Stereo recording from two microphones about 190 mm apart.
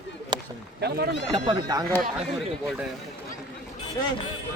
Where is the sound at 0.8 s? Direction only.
55° right (ahead or behind).